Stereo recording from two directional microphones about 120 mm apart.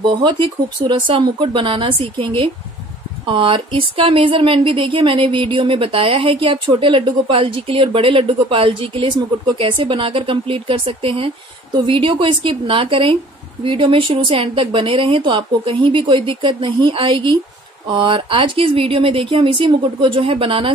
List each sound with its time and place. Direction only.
0.0 s speech: 40° right (ahead or behind)